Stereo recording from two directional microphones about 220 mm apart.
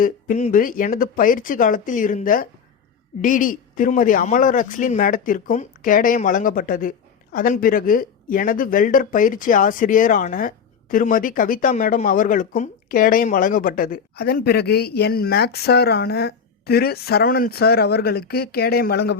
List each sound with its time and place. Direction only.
0.0 s speech: 35° left (ahead or behind)